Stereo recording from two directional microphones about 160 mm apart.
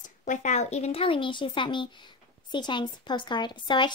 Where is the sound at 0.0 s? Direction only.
50° left (ahead or behind).